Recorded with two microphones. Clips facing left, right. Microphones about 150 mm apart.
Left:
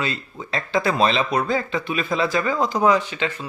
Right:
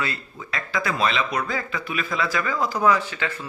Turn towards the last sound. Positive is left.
turn(degrees=20)  # may be behind; listen again after turning